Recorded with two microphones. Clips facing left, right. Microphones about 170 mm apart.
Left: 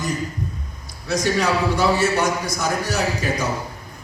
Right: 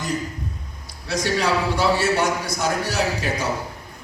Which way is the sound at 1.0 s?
45° left (ahead or behind).